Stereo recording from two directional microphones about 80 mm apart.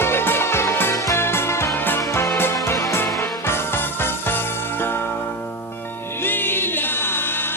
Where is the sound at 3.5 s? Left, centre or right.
Left.